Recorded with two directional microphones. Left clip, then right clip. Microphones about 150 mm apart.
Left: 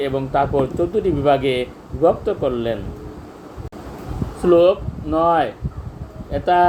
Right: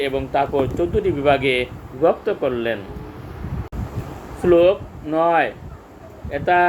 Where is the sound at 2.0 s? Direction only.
5° right (ahead or behind).